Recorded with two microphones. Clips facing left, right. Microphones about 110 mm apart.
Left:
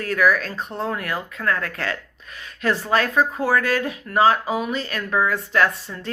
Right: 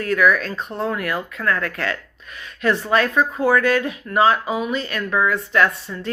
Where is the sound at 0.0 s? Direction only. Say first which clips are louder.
Right 2 dB; 35° left (ahead or behind).